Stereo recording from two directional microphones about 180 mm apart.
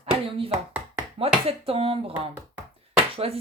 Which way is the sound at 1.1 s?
35° right (ahead or behind).